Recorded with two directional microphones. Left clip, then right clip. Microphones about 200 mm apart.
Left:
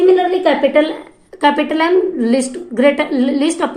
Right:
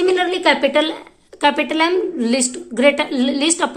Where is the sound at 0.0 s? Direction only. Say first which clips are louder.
Left 4 dB; 20° right (ahead or behind).